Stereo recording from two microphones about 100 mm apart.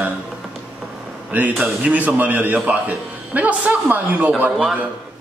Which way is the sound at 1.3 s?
15° right (ahead or behind).